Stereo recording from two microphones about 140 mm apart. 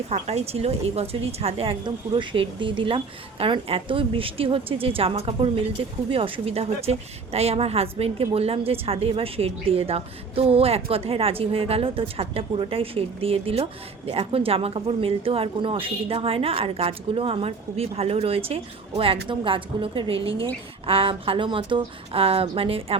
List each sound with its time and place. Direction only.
0.1 s a woman's voice: 50° right (ahead or behind)